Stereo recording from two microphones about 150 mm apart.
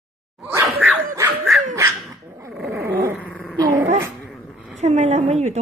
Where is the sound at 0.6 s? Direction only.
15° right (ahead or behind).